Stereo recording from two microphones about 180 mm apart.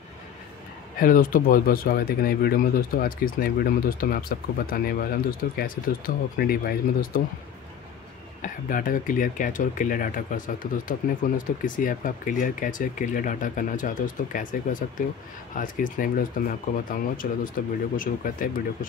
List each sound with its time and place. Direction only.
0.9 s speech: 50° left (ahead or behind)
8.4 s speech: 50° left (ahead or behind)